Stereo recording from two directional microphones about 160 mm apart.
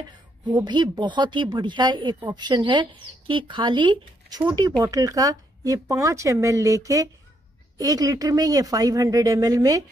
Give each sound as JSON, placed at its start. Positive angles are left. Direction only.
{"t": 0.5, "sound": "speech", "side_deg": -25}